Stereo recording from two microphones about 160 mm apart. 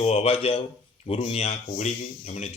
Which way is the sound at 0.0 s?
40° left (ahead or behind).